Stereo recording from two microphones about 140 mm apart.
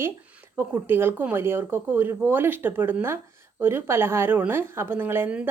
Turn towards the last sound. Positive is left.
turn(degrees=-10)  # may be behind; listen again after turning